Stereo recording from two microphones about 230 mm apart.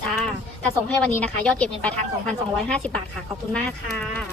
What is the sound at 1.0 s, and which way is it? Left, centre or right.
Speech, centre.